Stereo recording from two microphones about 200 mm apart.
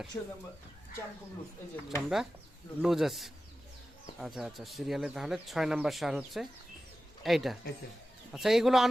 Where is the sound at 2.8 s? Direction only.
Centre (ahead or behind).